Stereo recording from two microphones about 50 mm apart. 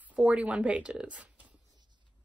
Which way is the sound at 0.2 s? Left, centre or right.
Centre.